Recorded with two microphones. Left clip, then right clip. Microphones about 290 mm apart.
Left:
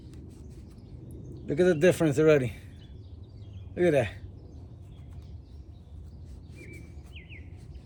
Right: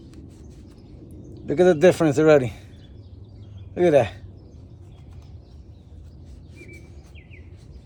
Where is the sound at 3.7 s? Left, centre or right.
Right.